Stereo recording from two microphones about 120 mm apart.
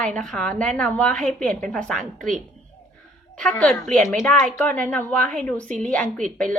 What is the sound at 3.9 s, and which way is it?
A woman's voice, 5° left (ahead or behind).